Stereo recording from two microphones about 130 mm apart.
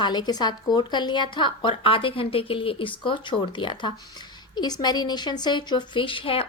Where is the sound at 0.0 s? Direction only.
35° left (ahead or behind).